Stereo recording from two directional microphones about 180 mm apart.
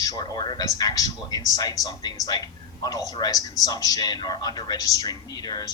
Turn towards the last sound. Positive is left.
turn(degrees=20)  # may be behind; listen again after turning